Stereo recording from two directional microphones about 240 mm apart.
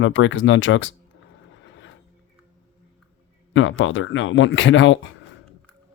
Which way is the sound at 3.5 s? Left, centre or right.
Left.